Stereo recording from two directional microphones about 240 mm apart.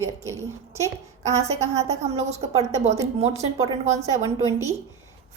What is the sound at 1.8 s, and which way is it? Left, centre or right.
A woman's voice, right.